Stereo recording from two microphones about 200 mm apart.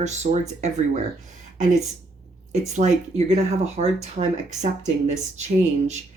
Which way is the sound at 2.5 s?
35° right (ahead or behind).